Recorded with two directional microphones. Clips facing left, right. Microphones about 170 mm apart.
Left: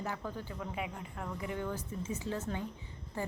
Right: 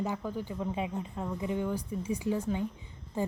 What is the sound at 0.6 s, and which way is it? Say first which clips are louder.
A woman's voice: right 7 dB; 25° right (ahead or behind).